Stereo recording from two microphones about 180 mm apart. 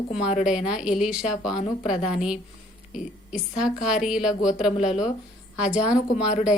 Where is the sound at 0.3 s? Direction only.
40° left (ahead or behind).